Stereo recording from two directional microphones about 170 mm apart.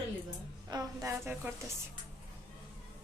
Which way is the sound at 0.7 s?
20° right (ahead or behind).